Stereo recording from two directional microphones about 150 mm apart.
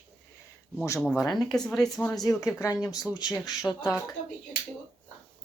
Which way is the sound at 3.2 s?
25° left (ahead or behind).